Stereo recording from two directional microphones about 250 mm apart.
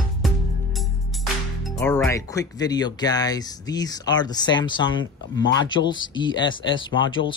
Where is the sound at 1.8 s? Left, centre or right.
Centre.